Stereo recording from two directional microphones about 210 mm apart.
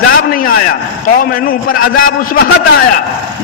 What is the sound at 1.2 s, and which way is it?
A man's voice, 45° left (ahead or behind).